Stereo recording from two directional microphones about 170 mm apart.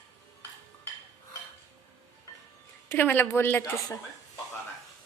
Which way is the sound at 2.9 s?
10° left (ahead or behind).